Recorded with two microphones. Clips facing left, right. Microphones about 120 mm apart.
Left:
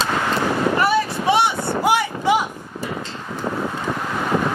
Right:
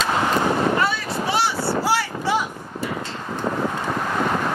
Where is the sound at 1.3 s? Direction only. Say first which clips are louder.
Left 3 dB; 20° left (ahead or behind).